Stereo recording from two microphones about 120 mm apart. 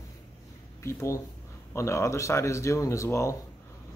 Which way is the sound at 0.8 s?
25° left (ahead or behind).